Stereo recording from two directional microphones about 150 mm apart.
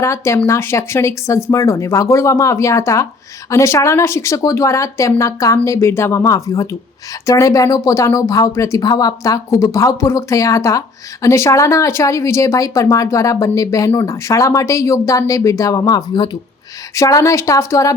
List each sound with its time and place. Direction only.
0.0 s speech: 20° left (ahead or behind)